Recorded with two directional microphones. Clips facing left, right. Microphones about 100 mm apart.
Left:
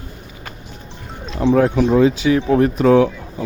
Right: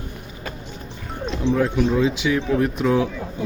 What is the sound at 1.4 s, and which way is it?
Speech, 55° left (ahead or behind).